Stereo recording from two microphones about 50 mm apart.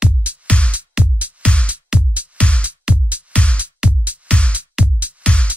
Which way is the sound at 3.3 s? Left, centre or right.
Left.